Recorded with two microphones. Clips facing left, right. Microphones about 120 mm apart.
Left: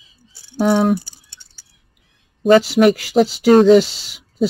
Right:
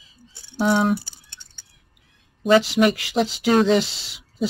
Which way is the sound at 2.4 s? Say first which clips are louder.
Left 5 dB; 40° left (ahead or behind).